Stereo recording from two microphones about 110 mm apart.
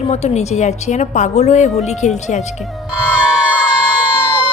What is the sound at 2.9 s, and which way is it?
Music, 10° right (ahead or behind).